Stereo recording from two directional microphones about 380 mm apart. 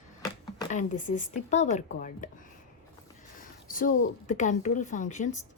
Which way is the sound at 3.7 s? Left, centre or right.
Left.